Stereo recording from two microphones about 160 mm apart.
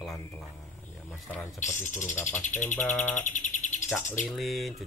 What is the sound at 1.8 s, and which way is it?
Bird, 50° left (ahead or behind).